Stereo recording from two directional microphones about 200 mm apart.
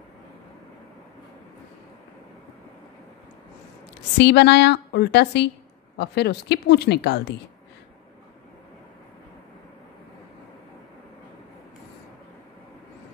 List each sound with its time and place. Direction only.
4.2 s speech: 55° left (ahead or behind)